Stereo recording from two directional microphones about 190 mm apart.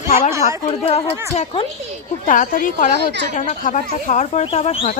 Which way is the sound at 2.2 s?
45° left (ahead or behind).